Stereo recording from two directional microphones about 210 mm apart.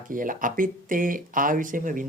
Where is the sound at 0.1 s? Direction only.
40° right (ahead or behind).